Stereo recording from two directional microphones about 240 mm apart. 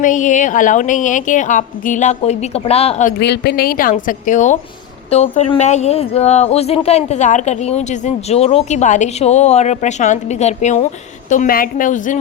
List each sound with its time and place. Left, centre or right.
0.0 s a woman's voice: left
3.2 s a woman's voice: left